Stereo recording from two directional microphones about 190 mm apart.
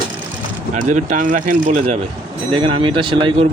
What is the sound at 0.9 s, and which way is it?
Speech, 40° right (ahead or behind).